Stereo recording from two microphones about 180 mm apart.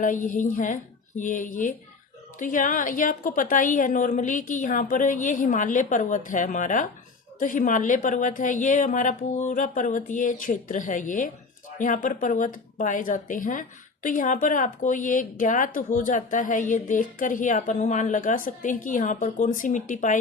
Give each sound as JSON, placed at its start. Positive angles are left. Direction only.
{"t": 0.0, "sound": "a woman's voice", "side_deg": 45}